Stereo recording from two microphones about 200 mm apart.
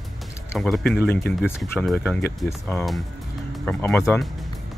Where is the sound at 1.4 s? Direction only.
5° right (ahead or behind).